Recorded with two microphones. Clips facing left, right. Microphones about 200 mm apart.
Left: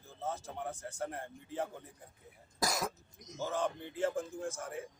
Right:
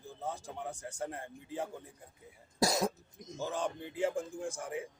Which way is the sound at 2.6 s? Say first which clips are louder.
Right 5 dB; 25° right (ahead or behind).